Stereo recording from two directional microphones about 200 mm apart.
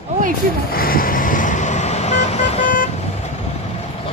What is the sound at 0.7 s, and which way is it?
Vehicle, 45° left (ahead or behind).